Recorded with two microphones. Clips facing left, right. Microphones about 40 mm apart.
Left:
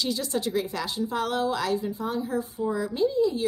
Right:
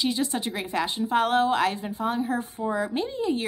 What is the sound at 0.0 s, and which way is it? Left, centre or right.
Speech, right.